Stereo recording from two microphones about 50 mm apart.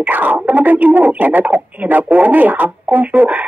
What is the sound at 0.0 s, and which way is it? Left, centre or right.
Speech, right.